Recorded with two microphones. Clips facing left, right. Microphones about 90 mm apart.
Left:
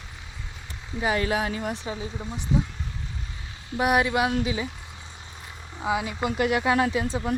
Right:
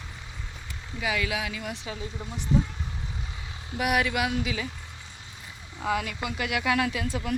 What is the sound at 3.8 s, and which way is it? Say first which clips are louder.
Speech: left 4 dB; 30° left (ahead or behind).